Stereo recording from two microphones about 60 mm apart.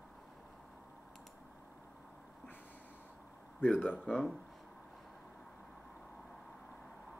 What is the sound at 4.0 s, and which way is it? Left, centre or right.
Speech, centre.